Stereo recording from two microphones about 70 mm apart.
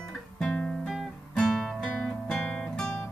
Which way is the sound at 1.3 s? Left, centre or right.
Centre.